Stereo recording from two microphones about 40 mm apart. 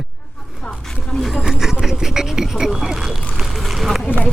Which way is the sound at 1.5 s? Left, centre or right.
Centre.